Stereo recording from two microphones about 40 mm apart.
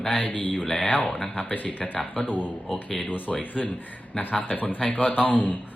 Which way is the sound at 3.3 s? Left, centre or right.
Left.